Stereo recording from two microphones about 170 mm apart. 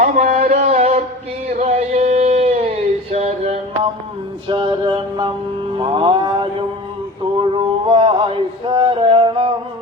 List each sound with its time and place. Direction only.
0.0 s a sound: 40° right (ahead or behind)
4.4 s music: 30° right (ahead or behind)
5.7 s mantra: 30° right (ahead or behind)
7.3 s male singing: 30° right (ahead or behind)